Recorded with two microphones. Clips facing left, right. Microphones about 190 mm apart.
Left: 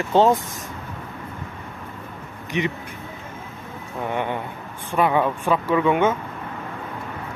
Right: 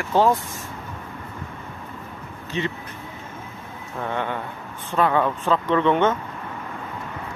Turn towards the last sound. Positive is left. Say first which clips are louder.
# even
turn(degrees=10)  # may be behind; listen again after turning